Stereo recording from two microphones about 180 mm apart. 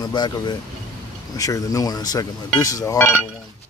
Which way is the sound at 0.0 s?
25° left (ahead or behind).